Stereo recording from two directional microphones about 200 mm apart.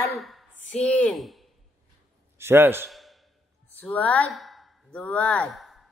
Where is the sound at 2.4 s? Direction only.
10° right (ahead or behind).